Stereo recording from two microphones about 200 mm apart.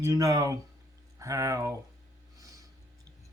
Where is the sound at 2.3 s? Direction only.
15° right (ahead or behind).